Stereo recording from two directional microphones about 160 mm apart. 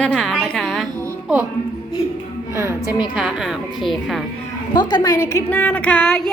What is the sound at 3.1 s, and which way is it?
A woman's voice, centre (ahead or behind).